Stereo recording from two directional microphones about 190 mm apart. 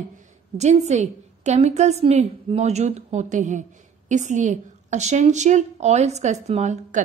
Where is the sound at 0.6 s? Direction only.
35° right (ahead or behind).